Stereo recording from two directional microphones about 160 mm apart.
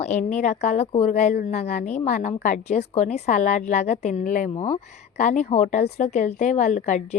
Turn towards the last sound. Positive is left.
turn(degrees=50)  # may be behind; listen again after turning